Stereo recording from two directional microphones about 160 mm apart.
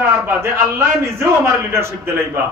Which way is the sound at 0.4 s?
15° right (ahead or behind).